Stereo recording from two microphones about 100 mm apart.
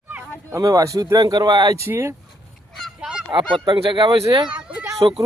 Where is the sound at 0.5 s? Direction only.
35° right (ahead or behind).